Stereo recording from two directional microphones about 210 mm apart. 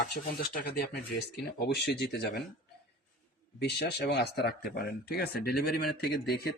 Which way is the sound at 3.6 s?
50° left (ahead or behind).